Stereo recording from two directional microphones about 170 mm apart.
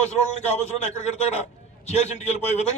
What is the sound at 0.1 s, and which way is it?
A man's voice, 40° left (ahead or behind).